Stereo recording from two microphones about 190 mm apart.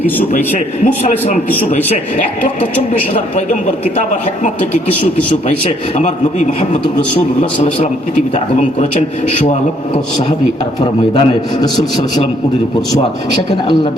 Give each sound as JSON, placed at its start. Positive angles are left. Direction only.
{"t": 1.0, "sound": "a man's voice", "side_deg": 40}
{"t": 5.5, "sound": "a man's voice", "side_deg": 35}
{"t": 10.8, "sound": "a man's voice", "side_deg": 25}